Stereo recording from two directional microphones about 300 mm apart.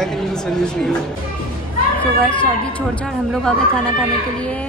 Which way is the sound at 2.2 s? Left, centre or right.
Centre.